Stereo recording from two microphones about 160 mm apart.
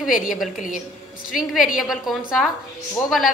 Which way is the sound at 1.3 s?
Centre (ahead or behind).